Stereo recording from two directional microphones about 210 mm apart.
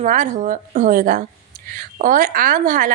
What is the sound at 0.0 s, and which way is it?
A woman's voice, 35° right (ahead or behind).